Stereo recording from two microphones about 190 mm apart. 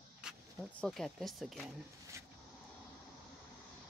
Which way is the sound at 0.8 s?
Centre (ahead or behind).